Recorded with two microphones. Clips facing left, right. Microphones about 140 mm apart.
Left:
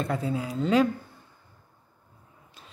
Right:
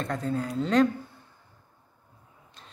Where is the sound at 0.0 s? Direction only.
5° left (ahead or behind).